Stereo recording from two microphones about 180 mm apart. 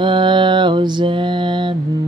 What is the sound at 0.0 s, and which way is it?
Mantra, 25° right (ahead or behind).